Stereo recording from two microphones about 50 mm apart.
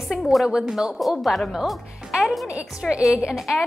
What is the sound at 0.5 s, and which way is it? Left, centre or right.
Speech, centre.